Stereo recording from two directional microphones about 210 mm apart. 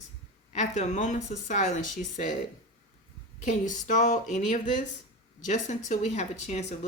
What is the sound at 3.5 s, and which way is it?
Speech, 35° left (ahead or behind).